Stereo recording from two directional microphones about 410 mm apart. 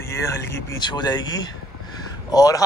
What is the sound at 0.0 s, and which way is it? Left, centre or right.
Speech, centre.